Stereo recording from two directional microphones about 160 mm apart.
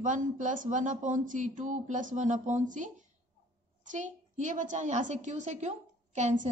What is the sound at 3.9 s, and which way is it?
A woman's voice, 50° right (ahead or behind).